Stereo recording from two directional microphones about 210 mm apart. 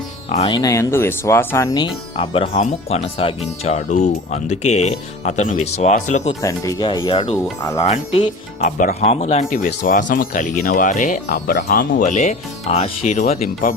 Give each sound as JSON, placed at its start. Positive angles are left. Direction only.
{"t": 0.3, "sound": "speech", "side_deg": 25}
{"t": 6.4, "sound": "speech", "side_deg": 15}